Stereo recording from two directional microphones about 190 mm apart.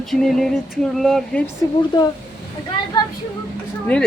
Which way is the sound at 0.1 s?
Centre (ahead or behind).